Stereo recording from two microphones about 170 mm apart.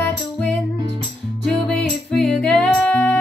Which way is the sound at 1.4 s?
5° left (ahead or behind).